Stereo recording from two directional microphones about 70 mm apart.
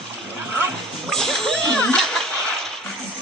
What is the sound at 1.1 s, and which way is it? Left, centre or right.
Splash, centre.